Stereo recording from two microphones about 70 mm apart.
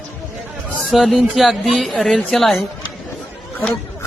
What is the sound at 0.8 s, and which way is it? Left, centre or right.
Speech, centre.